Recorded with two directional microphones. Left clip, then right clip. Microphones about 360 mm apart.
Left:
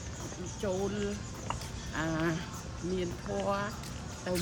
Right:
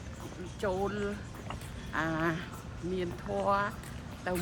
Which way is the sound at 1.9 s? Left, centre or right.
Centre.